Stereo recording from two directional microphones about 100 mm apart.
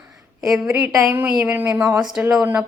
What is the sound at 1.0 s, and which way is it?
A woman's voice, 20° right (ahead or behind).